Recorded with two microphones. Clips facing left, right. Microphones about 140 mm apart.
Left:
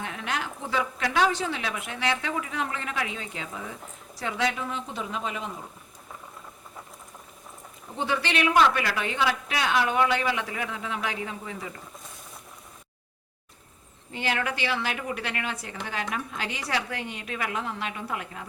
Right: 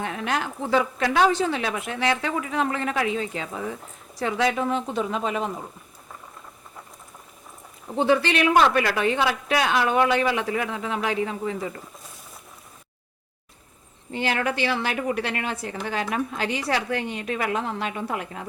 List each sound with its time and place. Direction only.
0.0 s a woman's voice: 40° right (ahead or behind)
7.9 s a woman's voice: 40° right (ahead or behind)
14.1 s a woman's voice: 35° right (ahead or behind)